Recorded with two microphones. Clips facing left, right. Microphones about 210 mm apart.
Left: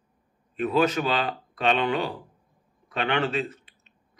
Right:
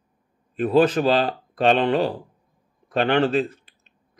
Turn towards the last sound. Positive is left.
turn(degrees=-35)  # may be behind; listen again after turning